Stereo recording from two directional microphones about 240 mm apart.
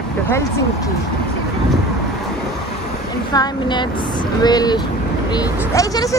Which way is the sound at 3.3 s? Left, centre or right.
Centre.